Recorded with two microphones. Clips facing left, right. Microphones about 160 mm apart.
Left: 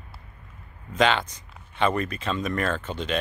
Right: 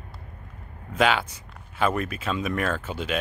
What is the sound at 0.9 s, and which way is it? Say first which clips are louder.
Speech: even; 5° right (ahead or behind).